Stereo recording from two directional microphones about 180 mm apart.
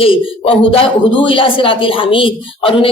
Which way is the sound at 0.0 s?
30° left (ahead or behind).